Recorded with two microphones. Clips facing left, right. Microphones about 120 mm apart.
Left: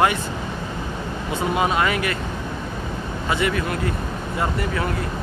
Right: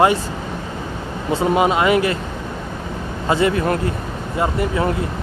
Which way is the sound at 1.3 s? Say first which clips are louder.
Right 5 dB; 20° right (ahead or behind).